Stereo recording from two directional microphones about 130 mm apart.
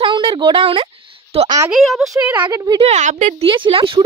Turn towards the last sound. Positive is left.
turn(degrees=-40)  # may be behind; listen again after turning